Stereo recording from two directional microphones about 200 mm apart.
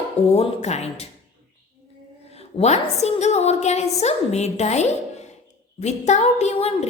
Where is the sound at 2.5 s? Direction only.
35° left (ahead or behind).